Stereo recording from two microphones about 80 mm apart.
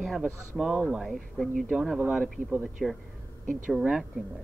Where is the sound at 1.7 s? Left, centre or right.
Centre.